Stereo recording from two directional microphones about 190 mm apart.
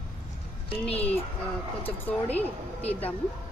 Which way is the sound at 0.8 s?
5° left (ahead or behind).